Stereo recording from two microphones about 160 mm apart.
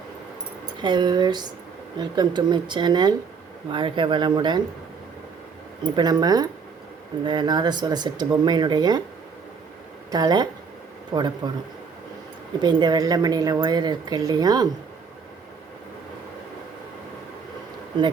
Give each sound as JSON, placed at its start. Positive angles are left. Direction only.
{"t": 0.8, "sound": "a woman's voice", "side_deg": -30}
{"t": 6.0, "sound": "a woman's voice", "side_deg": -25}
{"t": 10.1, "sound": "a woman's voice", "side_deg": -25}
{"t": 12.6, "sound": "a woman's voice", "side_deg": -25}